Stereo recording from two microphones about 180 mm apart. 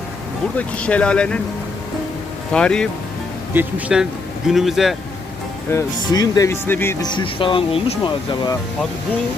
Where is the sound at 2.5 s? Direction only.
5° left (ahead or behind).